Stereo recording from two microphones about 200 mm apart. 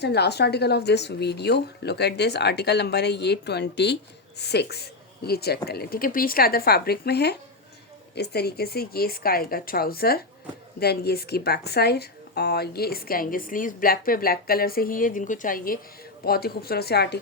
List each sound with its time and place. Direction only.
0.0 s a woman's voice: 55° left (ahead or behind)